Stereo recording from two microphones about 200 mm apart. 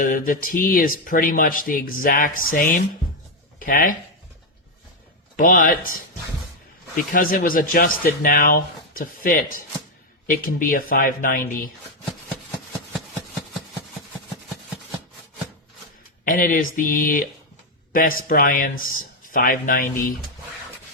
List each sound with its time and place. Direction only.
0.0 s speech: 45° left (ahead or behind)
5.4 s speech: 45° left (ahead or behind)
16.2 s speech: 45° left (ahead or behind)